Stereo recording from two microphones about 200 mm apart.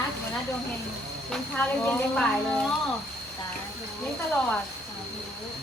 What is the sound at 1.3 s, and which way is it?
Speech, 5° left (ahead or behind).